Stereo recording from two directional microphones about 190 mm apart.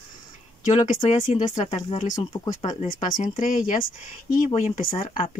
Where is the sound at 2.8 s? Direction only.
40° left (ahead or behind).